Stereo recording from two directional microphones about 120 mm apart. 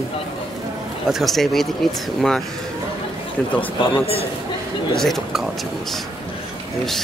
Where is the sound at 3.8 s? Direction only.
55° left (ahead or behind).